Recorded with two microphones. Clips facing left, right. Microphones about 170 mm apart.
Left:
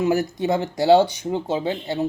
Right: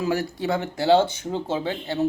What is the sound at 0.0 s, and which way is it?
Speech, 20° left (ahead or behind).